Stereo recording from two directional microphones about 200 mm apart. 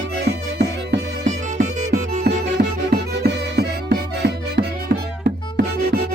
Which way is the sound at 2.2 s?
55° right (ahead or behind).